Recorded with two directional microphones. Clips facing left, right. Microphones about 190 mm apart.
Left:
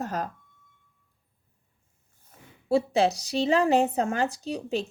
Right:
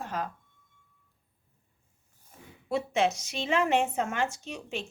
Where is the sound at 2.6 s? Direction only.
35° left (ahead or behind).